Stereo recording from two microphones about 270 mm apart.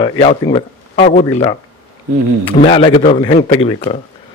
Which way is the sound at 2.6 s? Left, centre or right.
Left.